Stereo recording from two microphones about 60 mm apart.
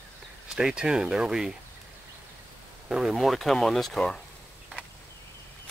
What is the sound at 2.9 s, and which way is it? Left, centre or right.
Speech, centre.